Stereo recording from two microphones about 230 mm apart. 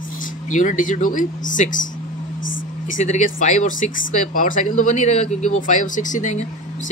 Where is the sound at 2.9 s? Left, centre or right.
Left.